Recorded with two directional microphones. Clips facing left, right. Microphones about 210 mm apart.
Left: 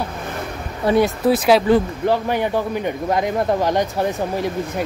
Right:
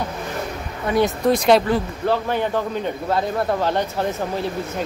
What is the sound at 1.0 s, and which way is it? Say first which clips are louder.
Speech: left 1 dB; 5° left (ahead or behind).